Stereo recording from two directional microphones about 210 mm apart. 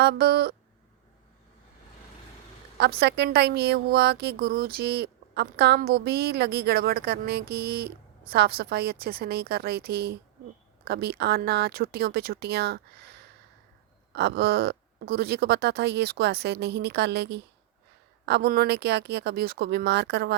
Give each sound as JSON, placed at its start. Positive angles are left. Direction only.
{"t": 0.0, "sound": "a woman's voice", "side_deg": -50}
{"t": 2.7, "sound": "a woman's voice", "side_deg": -50}
{"t": 14.1, "sound": "a woman's voice", "side_deg": -50}